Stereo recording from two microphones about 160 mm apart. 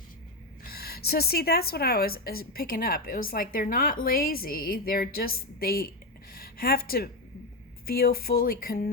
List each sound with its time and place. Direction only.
0.6 s a woman's voice: 75° left (ahead or behind)